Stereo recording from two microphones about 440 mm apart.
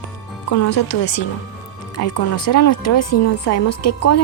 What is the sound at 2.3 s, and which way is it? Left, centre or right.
A woman's voice, left.